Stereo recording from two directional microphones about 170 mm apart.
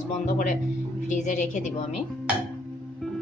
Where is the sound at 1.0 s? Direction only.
45° left (ahead or behind).